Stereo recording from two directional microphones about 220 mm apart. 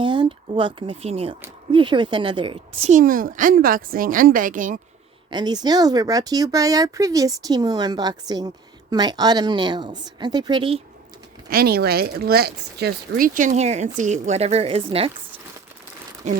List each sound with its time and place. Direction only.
0.0 s speech: 20° right (ahead or behind); by 4.8 s 35° right (ahead or behind)
5.3 s speech: 20° right (ahead or behind)
11.4 s speech: 45° right (ahead or behind); by 15.1 s 25° right (ahead or behind)